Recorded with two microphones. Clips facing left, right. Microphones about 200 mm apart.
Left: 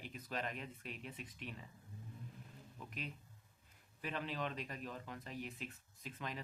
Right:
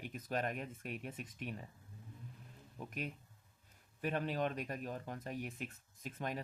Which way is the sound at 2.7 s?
45° right (ahead or behind).